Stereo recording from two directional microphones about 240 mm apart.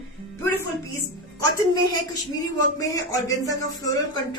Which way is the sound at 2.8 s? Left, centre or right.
Centre.